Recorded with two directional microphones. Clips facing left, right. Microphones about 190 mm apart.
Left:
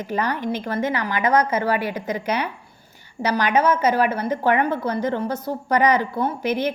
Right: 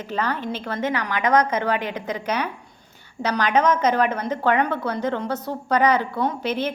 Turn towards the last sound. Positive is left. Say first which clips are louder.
# left 1 dB
turn(degrees=10)  # may be behind; listen again after turning